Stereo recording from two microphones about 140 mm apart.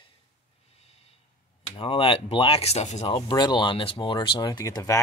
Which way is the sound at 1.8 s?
40° left (ahead or behind).